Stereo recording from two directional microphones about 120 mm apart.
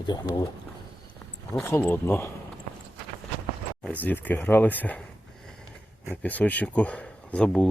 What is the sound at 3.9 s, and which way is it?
Speech, 15° left (ahead or behind).